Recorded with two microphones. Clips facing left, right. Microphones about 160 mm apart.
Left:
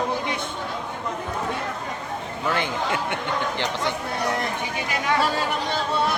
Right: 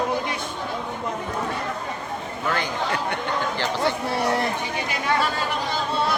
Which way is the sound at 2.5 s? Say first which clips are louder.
Left 1 dB; 20° left (ahead or behind).